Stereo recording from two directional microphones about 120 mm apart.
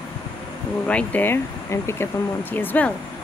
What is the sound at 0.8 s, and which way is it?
Speech, 15° left (ahead or behind).